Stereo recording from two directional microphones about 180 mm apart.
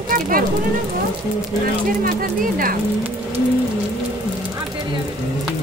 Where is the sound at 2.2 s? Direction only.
50° right (ahead or behind).